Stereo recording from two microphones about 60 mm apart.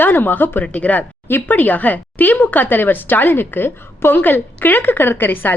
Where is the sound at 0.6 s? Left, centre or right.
Left.